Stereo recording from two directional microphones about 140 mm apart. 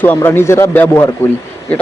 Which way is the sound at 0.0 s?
15° left (ahead or behind).